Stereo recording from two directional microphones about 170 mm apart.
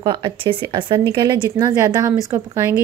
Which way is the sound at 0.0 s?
25° right (ahead or behind).